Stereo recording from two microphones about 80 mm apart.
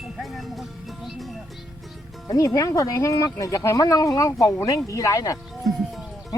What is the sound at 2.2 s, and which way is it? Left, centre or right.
Speech, left.